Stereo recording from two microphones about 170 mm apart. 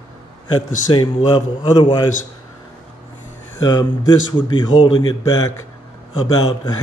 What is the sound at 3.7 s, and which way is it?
A man's voice, 25° left (ahead or behind).